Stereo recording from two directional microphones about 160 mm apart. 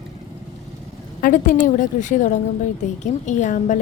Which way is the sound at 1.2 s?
60° left (ahead or behind).